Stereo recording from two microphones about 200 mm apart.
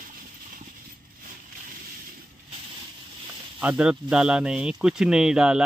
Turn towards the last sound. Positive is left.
turn(degrees=-5)  # may be behind; listen again after turning